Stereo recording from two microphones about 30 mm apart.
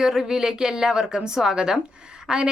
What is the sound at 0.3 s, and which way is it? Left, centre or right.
A woman's voice, right.